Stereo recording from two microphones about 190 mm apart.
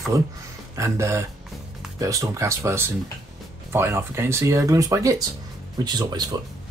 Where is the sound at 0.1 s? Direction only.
15° right (ahead or behind).